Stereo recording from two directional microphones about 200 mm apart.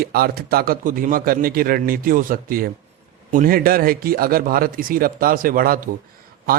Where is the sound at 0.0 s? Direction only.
50° right (ahead or behind).